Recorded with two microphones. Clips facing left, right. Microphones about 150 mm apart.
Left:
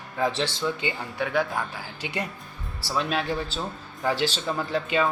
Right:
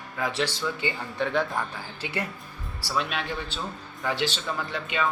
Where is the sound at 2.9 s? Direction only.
35° left (ahead or behind).